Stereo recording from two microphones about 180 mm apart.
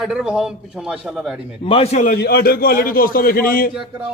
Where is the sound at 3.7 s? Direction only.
5° right (ahead or behind).